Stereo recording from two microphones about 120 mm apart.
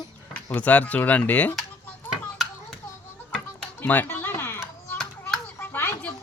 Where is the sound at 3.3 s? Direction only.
15° left (ahead or behind).